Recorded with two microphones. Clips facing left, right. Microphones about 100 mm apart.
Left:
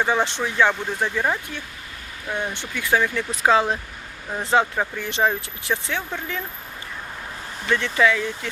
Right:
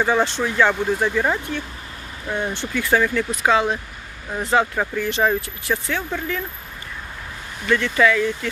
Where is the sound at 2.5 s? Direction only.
15° left (ahead or behind).